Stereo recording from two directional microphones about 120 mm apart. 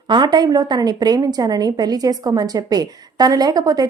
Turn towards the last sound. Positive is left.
turn(degrees=-30)  # may be behind; listen again after turning